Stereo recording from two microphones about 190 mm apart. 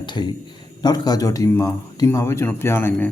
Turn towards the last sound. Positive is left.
turn(degrees=10)  # may be behind; listen again after turning